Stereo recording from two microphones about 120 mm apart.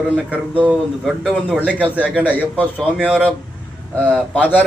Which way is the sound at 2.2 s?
15° left (ahead or behind).